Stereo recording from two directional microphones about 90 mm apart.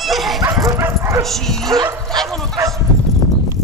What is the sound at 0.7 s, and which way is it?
Bow-wow, 30° right (ahead or behind).